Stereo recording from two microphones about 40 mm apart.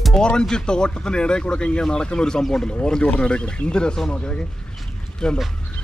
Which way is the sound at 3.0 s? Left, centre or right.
Left.